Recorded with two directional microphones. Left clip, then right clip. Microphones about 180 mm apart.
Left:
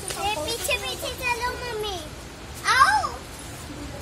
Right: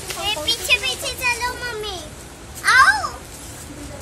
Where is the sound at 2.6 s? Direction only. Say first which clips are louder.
Right 5 dB; centre (ahead or behind).